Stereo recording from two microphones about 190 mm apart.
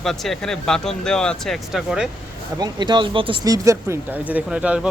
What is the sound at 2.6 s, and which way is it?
Speech, 25° right (ahead or behind).